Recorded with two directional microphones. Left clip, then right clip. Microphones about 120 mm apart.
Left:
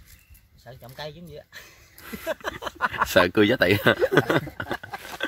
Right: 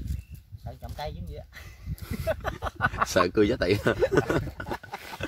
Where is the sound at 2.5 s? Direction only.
15° left (ahead or behind).